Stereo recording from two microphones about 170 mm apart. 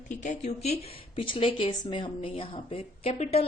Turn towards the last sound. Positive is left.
turn(degrees=40)  # may be behind; listen again after turning